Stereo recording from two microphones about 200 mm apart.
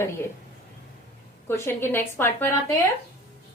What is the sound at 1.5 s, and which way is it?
Speech, 10° left (ahead or behind).